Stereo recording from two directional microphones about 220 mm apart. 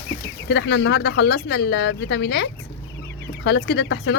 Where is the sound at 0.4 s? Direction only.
55° left (ahead or behind).